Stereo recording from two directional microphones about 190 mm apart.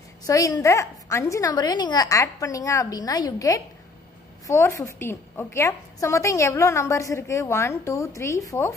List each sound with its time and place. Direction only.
0.3 s a woman's voice: 15° left (ahead or behind)